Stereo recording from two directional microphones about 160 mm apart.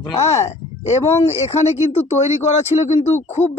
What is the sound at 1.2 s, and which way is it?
Speech, 40° left (ahead or behind).